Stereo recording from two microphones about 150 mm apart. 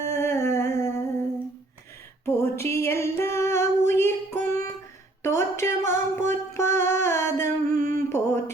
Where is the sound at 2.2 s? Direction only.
15° left (ahead or behind).